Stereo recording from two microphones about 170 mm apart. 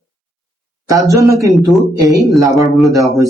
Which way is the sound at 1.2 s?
20° right (ahead or behind).